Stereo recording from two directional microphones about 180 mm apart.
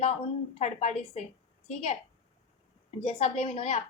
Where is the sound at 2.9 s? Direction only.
40° left (ahead or behind).